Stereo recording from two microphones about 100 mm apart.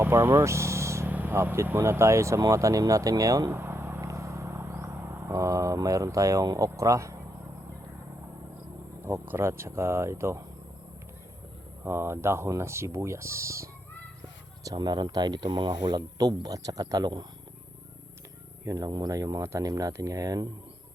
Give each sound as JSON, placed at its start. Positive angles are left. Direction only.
{"t": 0.0, "sound": "vehicle", "side_deg": -25}
{"t": 1.0, "sound": "speech", "side_deg": -15}
{"t": 3.6, "sound": "vehicle", "side_deg": -25}
{"t": 9.0, "sound": "speech", "side_deg": -20}
{"t": 11.9, "sound": "speech", "side_deg": -25}
{"t": 14.6, "sound": "speech", "side_deg": -40}
{"t": 18.6, "sound": "speech", "side_deg": -35}